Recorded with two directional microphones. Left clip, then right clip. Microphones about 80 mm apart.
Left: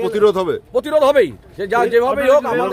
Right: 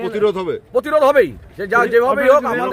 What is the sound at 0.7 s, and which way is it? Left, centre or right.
Speech, left.